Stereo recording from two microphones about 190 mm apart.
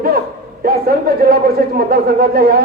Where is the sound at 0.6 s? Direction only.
55° right (ahead or behind).